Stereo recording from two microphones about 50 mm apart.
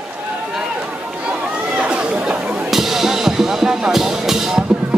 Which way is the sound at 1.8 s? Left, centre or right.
Right.